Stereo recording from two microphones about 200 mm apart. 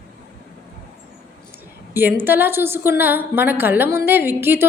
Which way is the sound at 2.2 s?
10° right (ahead or behind).